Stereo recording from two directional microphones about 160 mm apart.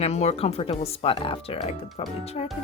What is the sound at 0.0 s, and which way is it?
Speech, 40° left (ahead or behind).